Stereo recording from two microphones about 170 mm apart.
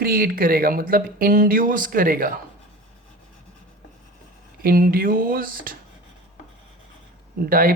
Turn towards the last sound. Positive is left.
turn(degrees=-55)  # may be behind; listen again after turning